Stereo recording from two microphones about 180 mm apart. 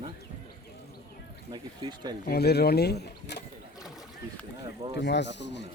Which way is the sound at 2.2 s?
65° left (ahead or behind).